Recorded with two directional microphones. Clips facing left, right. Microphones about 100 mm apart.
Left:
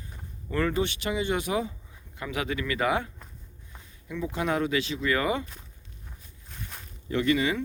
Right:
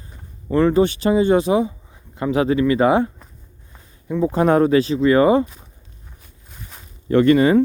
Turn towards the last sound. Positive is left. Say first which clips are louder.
# right 12 dB
turn(degrees=-50)  # may be behind; listen again after turning